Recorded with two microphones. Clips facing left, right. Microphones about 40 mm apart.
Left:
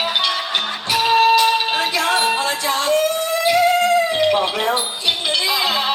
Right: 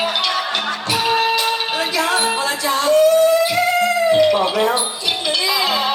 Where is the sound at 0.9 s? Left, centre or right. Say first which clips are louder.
Left 4 dB; left.